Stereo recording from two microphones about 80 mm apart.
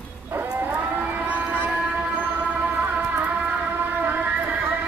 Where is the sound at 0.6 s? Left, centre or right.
Right.